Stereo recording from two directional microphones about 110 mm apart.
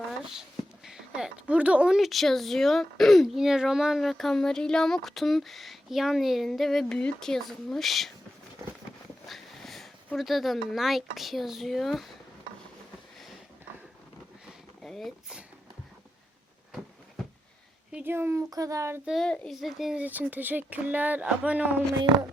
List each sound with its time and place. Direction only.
0.9 s speech: 5° right (ahead or behind)
9.2 s a sound: centre (ahead or behind)
10.2 s speech: centre (ahead or behind)
14.8 s speech: 5° left (ahead or behind)
17.9 s speech: 20° right (ahead or behind)
19.0 s speech: 5° left (ahead or behind)
20.0 s speech: 15° right (ahead or behind)